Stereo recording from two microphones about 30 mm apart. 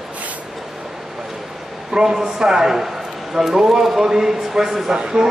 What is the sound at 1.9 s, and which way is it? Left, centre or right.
A man's voice, right.